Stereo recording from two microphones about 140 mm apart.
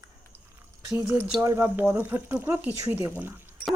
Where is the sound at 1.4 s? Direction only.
20° right (ahead or behind).